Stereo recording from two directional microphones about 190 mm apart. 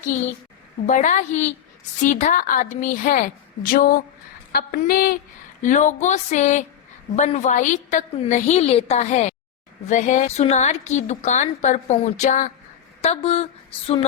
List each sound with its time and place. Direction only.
0.1 s a woman's voice: 40° left (ahead or behind)